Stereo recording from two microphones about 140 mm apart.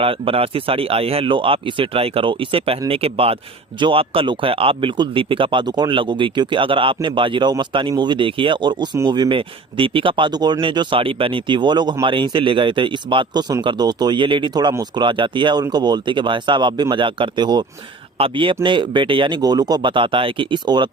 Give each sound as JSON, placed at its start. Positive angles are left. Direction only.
{"t": 0.0, "sound": "speech", "side_deg": -40}